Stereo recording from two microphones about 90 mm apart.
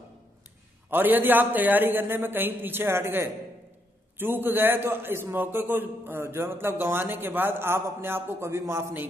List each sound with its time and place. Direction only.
0.8 s a man's voice: 20° right (ahead or behind)